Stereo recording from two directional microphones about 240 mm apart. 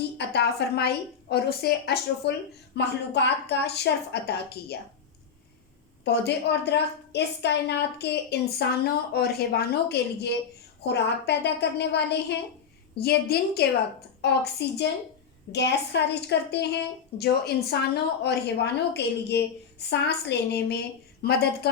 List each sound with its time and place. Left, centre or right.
0.2 s a woman's voice: left
6.1 s a woman's voice: left